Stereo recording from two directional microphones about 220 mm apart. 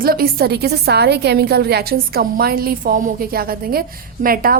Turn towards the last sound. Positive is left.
turn(degrees=-40)  # may be behind; listen again after turning